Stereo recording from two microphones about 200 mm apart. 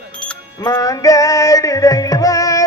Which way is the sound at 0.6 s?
15° left (ahead or behind).